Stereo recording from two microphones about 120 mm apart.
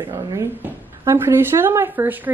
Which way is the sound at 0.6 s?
20° right (ahead or behind).